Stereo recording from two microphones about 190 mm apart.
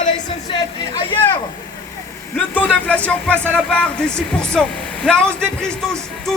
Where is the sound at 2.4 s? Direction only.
10° left (ahead or behind).